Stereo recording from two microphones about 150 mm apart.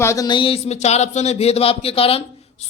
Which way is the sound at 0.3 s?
35° left (ahead or behind).